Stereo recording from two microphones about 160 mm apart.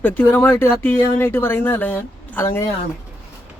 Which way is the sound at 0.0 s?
10° left (ahead or behind).